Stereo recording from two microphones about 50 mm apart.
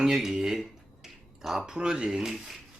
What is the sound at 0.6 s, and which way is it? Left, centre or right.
Finger snapping, centre.